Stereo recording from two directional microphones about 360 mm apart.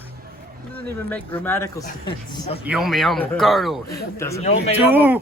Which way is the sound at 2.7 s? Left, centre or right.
Centre.